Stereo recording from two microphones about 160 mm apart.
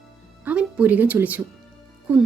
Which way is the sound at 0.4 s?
10° right (ahead or behind).